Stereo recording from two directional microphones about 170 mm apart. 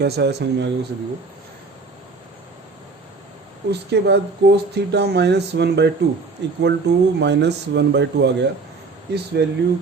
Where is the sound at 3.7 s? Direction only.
75° right (ahead or behind).